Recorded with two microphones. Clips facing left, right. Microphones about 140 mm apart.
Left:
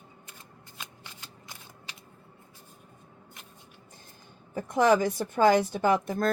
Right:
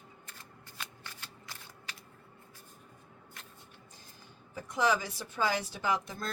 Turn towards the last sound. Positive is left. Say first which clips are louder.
# left 9 dB
turn(degrees=50)  # may be behind; listen again after turning